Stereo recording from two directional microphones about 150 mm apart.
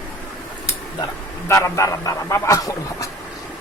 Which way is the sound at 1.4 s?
20° left (ahead or behind).